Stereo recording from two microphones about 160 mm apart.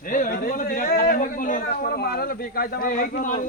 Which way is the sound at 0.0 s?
60° left (ahead or behind).